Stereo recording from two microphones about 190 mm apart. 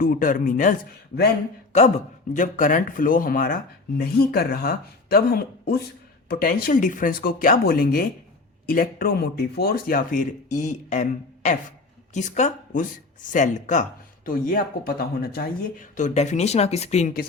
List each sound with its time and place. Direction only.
0.0 s speech: 45° left (ahead or behind)
1.7 s speech: 35° left (ahead or behind)
12.1 s speech: 40° left (ahead or behind)